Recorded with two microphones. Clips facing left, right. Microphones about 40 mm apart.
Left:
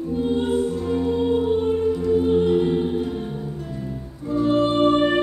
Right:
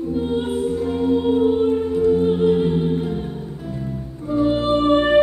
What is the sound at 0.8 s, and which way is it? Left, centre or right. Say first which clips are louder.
Music: right 2 dB; centre.